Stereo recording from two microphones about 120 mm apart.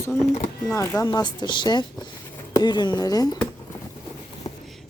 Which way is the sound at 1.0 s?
35° left (ahead or behind).